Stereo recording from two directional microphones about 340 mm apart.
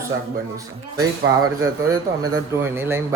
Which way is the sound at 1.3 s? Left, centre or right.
Right.